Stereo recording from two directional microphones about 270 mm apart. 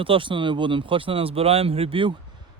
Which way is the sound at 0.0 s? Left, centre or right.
Centre.